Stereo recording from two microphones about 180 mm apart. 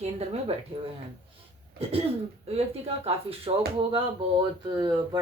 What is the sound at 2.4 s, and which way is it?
Speech, 35° right (ahead or behind).